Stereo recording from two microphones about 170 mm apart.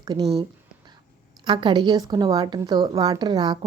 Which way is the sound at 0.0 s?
25° right (ahead or behind).